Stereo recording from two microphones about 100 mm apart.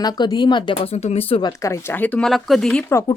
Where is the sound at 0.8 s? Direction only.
90° left.